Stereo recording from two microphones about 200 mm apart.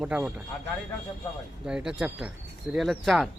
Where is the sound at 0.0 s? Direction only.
5° right (ahead or behind).